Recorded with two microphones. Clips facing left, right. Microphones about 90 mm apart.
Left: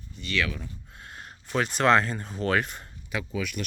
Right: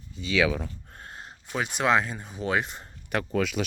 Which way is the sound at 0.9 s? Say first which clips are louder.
Right 1 dB; 30° right (ahead or behind).